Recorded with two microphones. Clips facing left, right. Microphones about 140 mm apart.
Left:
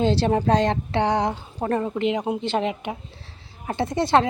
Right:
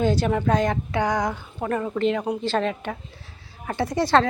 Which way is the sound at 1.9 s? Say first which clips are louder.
Even; 15° left (ahead or behind).